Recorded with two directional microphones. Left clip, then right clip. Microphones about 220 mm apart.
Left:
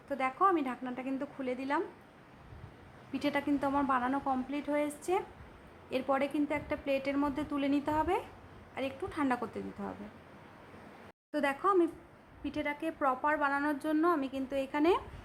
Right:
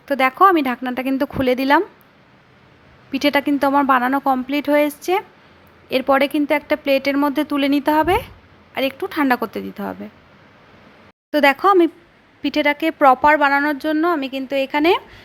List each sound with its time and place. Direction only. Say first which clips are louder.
0.1 s a woman's voice: right 16 dB; 30° right (ahead or behind)
3.1 s a woman's voice: right 15 dB; 25° right (ahead or behind)
11.3 s a woman's voice: right 16 dB; 25° right (ahead or behind)